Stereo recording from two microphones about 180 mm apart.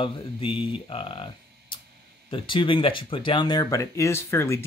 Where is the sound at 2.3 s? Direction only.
25° left (ahead or behind).